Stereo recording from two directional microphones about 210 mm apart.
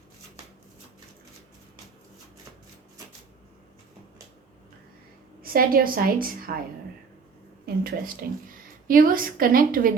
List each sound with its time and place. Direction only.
5.4 s a woman's voice: 45° right (ahead or behind)
7.6 s a woman's voice: 45° right (ahead or behind)